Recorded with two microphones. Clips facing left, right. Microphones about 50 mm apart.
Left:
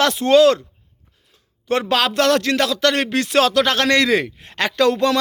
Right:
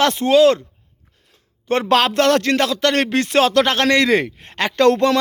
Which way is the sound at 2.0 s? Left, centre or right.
Right.